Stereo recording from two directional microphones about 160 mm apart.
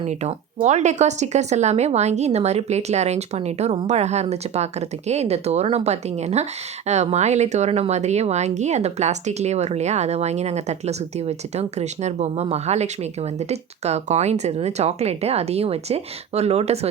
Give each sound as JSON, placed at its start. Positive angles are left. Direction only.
{"t": 0.0, "sound": "a woman's voice", "side_deg": -40}